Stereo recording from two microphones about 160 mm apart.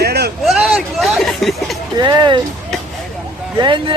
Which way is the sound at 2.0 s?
30° right (ahead or behind).